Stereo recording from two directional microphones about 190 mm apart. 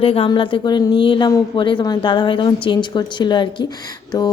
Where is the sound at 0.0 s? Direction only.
30° left (ahead or behind).